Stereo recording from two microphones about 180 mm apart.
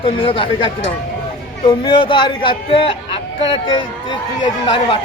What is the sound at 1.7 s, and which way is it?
A man's voice, 30° left (ahead or behind).